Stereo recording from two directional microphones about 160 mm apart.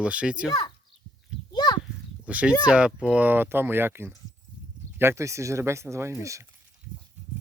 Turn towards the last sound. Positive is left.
turn(degrees=-20)  # may be behind; listen again after turning